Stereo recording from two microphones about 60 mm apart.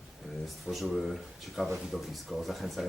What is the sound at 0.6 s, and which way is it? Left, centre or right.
Speech, centre.